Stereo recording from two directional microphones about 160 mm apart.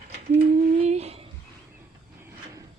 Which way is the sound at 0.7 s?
40° right (ahead or behind).